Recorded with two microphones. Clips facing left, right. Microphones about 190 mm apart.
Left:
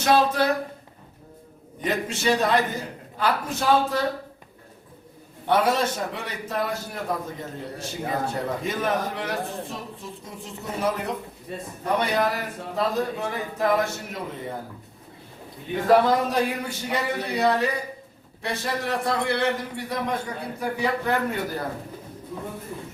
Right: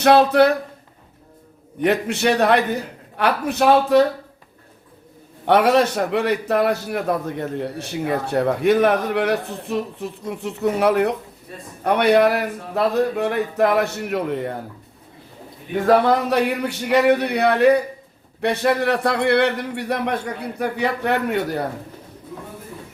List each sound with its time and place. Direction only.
0.0 s a man's voice: 65° right (ahead or behind)
1.8 s a man's voice: 65° right (ahead or behind)
5.5 s a man's voice: 70° right (ahead or behind)
16.0 s a man's voice: 70° right (ahead or behind)